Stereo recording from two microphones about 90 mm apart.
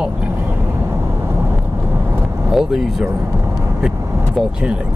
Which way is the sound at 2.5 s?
5° right (ahead or behind).